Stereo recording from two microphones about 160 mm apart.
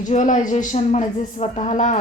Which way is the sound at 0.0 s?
50° left (ahead or behind).